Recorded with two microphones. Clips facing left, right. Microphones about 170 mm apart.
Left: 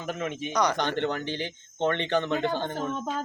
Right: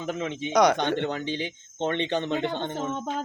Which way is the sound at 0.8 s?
20° right (ahead or behind).